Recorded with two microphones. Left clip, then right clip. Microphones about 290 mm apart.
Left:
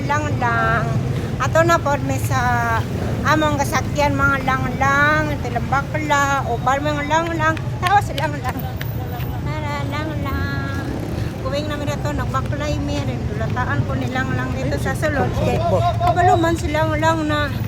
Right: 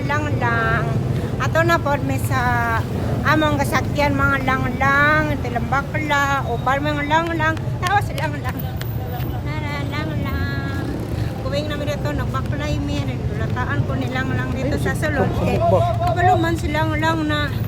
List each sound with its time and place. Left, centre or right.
0.1 s speech: centre
11.5 s speech: centre
14.7 s speech: centre